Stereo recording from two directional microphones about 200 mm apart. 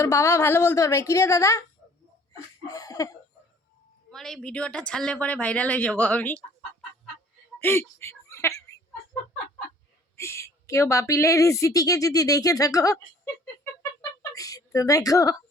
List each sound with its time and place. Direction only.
0.0 s a woman's voice: 15° left (ahead or behind)
2.6 s a woman's voice: 20° left (ahead or behind)
4.1 s speech: centre (ahead or behind)
7.6 s speech: 10° left (ahead or behind)
10.2 s a woman's voice: 15° left (ahead or behind)